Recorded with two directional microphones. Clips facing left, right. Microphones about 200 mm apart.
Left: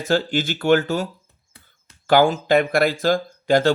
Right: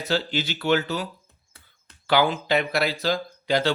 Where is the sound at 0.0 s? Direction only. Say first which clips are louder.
Left 5 dB; 50° left (ahead or behind).